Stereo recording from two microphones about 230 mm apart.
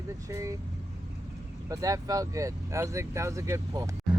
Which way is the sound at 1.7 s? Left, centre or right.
Centre.